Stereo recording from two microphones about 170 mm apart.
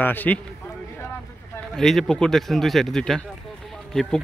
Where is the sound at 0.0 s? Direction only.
10° left (ahead or behind).